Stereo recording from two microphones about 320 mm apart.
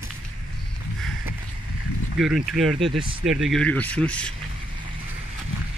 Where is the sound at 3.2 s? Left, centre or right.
Centre.